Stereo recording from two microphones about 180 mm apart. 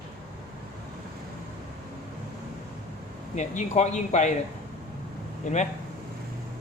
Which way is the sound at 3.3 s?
40° left (ahead or behind).